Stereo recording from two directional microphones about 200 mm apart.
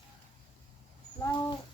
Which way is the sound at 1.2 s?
20° left (ahead or behind).